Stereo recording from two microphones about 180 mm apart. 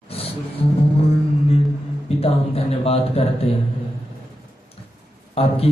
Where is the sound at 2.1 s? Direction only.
35° left (ahead or behind).